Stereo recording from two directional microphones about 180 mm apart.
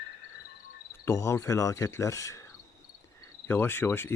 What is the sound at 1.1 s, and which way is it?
Cricket, 15° left (ahead or behind).